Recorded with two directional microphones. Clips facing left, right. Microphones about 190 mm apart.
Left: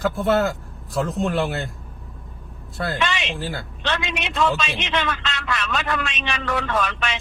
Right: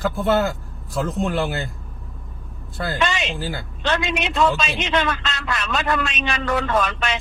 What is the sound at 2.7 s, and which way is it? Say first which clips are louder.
Speech: even; centre (ahead or behind).